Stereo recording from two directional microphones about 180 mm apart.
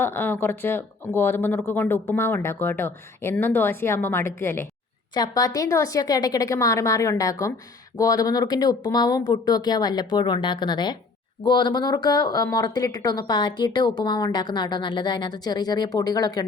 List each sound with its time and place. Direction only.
0.0 s speech: 10° left (ahead or behind)